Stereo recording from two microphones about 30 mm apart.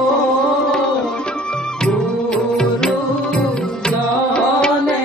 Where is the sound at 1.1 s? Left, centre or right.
Left.